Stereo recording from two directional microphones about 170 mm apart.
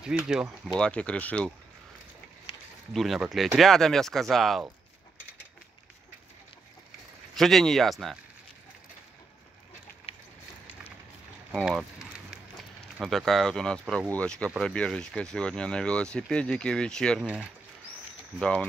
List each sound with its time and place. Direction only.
0.0 s speech: 5° right (ahead or behind)
2.9 s speech: centre (ahead or behind)
7.3 s speech: centre (ahead or behind)
10.1 s a sound: 35° left (ahead or behind)
11.6 s a sound: 5° right (ahead or behind)
14.1 s speech: 5° left (ahead or behind)
18.4 s speech: 5° left (ahead or behind)